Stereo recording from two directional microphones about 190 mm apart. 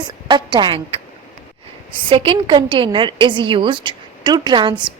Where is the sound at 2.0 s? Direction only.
30° right (ahead or behind).